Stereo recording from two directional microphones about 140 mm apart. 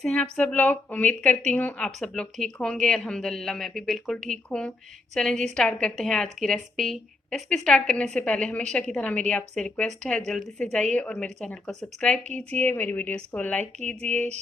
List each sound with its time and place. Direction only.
0.0 s a woman's voice: 5° left (ahead or behind)
13.7 s speech: 55° right (ahead or behind)